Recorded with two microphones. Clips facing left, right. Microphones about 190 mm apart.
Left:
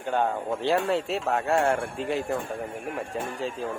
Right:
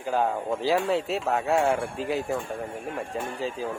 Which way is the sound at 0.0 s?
Centre (ahead or behind).